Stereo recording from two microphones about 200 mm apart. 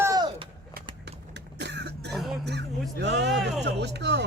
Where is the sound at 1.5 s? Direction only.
60° right (ahead or behind).